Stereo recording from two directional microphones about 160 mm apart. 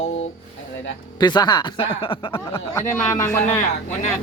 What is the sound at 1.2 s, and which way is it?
Speech, 25° left (ahead or behind).